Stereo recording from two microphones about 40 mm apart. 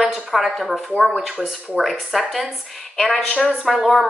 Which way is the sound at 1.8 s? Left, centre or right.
Centre.